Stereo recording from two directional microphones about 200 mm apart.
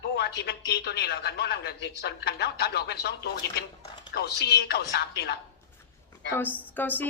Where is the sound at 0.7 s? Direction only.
55° left (ahead or behind).